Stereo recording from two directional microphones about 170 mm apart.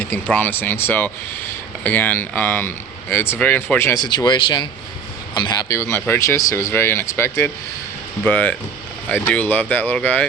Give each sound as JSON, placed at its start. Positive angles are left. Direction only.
{"t": 0.0, "sound": "speech", "side_deg": 10}